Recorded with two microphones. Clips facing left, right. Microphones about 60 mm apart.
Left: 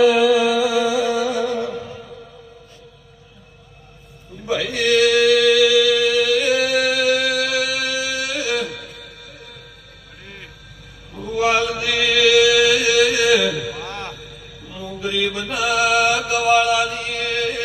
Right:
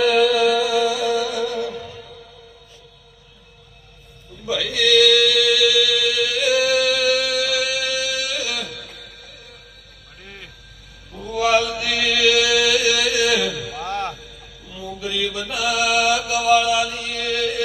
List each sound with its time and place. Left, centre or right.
0.0 s music: centre
4.4 s mantra: left
11.2 s chant: left
14.7 s mantra: left